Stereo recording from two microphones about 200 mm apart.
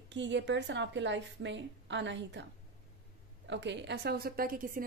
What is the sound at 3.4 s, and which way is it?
Speech, 60° right (ahead or behind).